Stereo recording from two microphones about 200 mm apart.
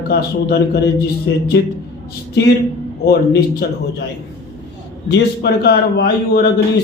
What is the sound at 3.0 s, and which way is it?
Speech, 55° left (ahead or behind).